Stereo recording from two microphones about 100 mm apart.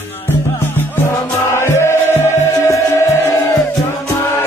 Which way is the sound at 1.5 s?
25° left (ahead or behind).